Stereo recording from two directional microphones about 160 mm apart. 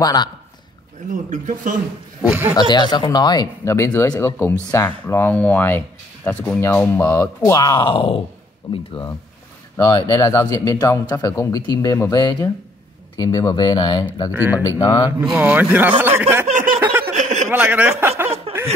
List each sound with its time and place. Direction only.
0.0 s speech: 25° left (ahead or behind)
1.1 s speech: 50° right (ahead or behind)
2.2 s speech: 10° right (ahead or behind)
2.7 s speech: 30° left (ahead or behind)
9.8 s speech: 20° left (ahead or behind)
14.3 s speech: 10° right (ahead or behind)
14.8 s speech: 30° left (ahead or behind)
15.3 s speech: 10° right (ahead or behind)
16.4 s a sound: 55° right (ahead or behind)
17.1 s chuckle: 50° right (ahead or behind)
17.5 s speech: 10° right (ahead or behind)